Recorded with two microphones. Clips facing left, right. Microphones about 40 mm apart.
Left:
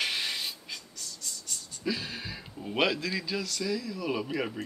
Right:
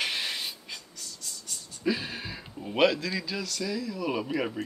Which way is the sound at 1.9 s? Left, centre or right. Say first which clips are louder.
Right 3 dB; centre.